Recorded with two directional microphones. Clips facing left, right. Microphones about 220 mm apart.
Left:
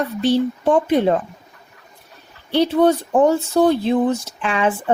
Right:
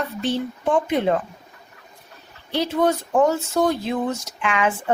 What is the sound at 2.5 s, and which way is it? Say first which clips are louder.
Speech: left 5 dB; 30° left (ahead or behind).